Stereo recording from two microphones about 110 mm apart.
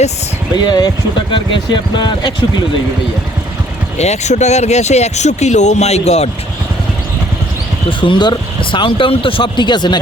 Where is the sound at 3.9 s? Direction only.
90° left.